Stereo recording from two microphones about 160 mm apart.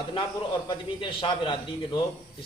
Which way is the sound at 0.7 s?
30° left (ahead or behind).